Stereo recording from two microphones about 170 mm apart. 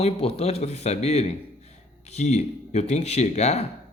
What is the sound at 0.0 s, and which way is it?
A man's voice, 35° left (ahead or behind).